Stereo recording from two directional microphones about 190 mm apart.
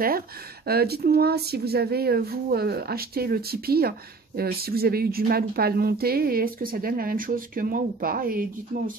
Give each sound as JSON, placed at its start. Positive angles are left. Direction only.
{"t": 0.7, "sound": "speech", "side_deg": -55}